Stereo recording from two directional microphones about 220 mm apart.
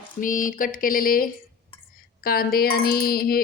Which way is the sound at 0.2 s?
35° left (ahead or behind).